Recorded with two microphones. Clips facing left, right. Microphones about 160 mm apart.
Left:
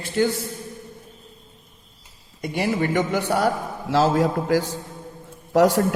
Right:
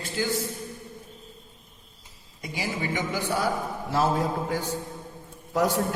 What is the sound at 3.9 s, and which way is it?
A man's voice, 90° left.